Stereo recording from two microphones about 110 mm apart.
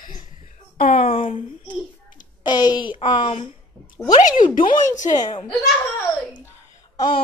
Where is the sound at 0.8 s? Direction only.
70° left (ahead or behind).